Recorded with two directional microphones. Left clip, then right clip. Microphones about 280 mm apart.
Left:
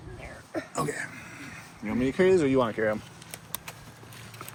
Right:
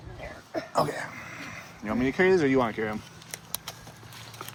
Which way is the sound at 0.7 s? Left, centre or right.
Right.